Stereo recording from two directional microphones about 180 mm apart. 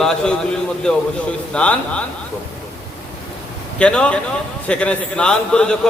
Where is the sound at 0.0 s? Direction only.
5° left (ahead or behind).